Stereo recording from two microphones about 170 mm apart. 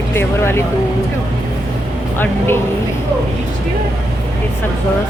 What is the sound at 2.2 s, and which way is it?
Speech, 15° left (ahead or behind).